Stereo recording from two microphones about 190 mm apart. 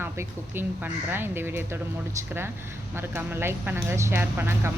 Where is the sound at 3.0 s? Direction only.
10° right (ahead or behind).